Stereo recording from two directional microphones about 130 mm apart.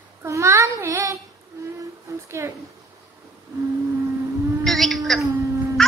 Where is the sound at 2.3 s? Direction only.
20° right (ahead or behind).